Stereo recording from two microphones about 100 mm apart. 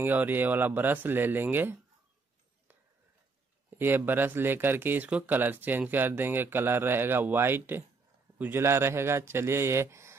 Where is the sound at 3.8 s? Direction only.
20° right (ahead or behind).